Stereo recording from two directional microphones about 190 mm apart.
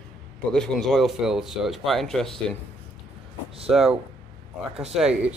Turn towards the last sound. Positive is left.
turn(degrees=-5)  # may be behind; listen again after turning